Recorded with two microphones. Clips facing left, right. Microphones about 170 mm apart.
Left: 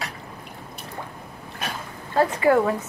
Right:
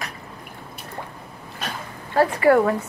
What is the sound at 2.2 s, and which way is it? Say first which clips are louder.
Speech: right 2 dB; 15° left (ahead or behind).